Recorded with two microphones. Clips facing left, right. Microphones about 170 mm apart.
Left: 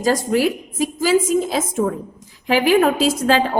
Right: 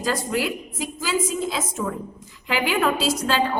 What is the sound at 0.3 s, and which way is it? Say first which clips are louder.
A woman's voice: left 7 dB; 50° left (ahead or behind).